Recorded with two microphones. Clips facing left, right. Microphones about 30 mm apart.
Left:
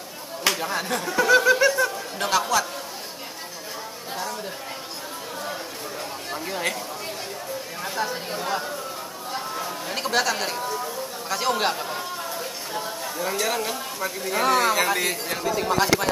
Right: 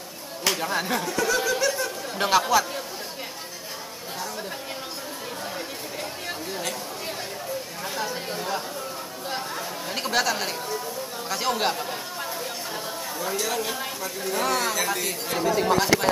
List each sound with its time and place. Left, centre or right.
0.5 s speech: centre
1.0 s snicker: centre
2.1 s speech: centre
7.8 s speech: centre
13.2 s speech: centre
14.8 s snicker: centre
15.8 s speech: centre